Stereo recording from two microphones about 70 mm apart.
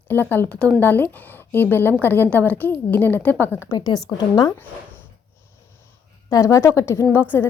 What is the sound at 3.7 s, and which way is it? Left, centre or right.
Speech, left.